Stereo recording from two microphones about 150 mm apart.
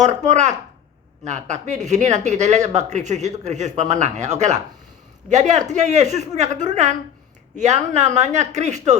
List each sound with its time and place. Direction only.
0.0 s speech: 50° right (ahead or behind)